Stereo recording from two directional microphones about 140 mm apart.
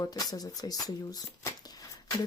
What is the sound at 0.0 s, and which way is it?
Speech, 25° left (ahead or behind).